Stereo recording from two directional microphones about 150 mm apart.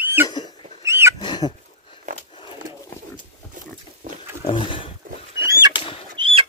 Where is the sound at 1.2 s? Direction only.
30° left (ahead or behind).